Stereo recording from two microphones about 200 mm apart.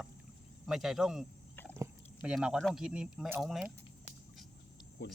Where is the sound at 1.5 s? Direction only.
10° left (ahead or behind).